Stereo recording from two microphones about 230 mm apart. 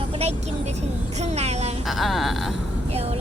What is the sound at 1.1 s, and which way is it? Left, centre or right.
Speech, right.